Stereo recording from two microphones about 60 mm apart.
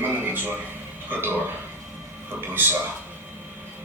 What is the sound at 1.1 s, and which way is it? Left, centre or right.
Speech, right.